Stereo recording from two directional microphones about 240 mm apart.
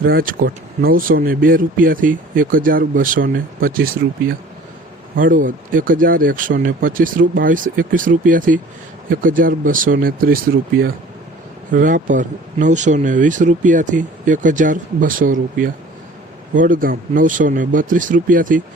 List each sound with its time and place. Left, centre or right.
0.0 s speech: right